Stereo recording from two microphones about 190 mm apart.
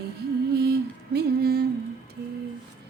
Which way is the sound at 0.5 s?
60° right (ahead or behind).